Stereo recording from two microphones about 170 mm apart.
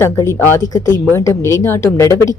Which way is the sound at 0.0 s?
15° left (ahead or behind).